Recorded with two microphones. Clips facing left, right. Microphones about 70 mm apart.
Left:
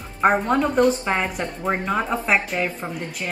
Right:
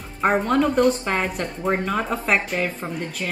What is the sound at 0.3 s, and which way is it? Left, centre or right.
A woman's voice, centre.